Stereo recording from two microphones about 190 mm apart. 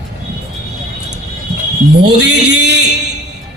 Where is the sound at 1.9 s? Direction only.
65° right (ahead or behind).